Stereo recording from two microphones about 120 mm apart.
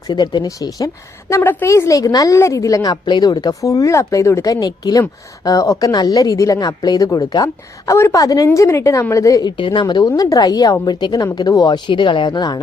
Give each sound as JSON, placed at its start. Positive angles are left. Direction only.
{"t": 0.1, "sound": "speech", "side_deg": 40}
{"t": 1.4, "sound": "a woman's voice", "side_deg": 15}
{"t": 9.8, "sound": "a woman's voice", "side_deg": 30}